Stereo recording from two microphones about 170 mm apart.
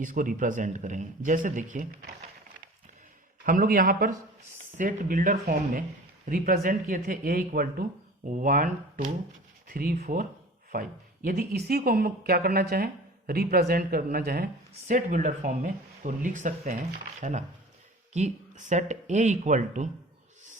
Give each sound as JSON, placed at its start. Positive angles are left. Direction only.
{"t": 0.0, "sound": "speech", "side_deg": -50}
{"t": 3.4, "sound": "speech", "side_deg": -55}